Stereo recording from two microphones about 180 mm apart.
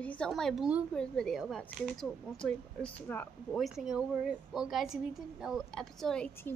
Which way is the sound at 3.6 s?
5° right (ahead or behind).